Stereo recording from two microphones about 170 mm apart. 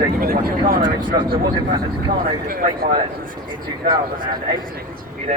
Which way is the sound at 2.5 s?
60° right (ahead or behind).